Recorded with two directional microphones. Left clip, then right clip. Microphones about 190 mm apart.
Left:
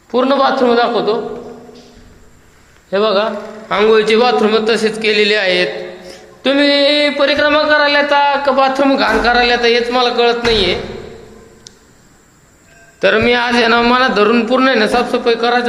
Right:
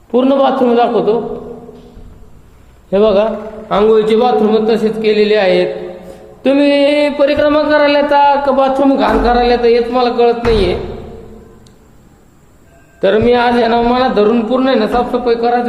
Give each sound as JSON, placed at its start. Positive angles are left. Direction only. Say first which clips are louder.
{"t": 0.2, "sound": "a man's voice", "louder": "right 1 dB", "side_deg": -20}
{"t": 2.9, "sound": "a man's voice", "louder": "right 3 dB", "side_deg": -25}
{"t": 3.7, "sound": "a man's voice", "louder": "right 1 dB", "side_deg": -10}
{"t": 6.4, "sound": "a sound", "louder": "right 1 dB", "side_deg": -25}
{"t": 13.0, "sound": "a man's voice", "louder": "right 1 dB", "side_deg": -10}